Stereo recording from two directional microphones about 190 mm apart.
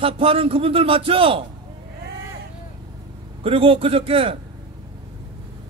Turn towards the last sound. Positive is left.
turn(degrees=-30)  # may be behind; listen again after turning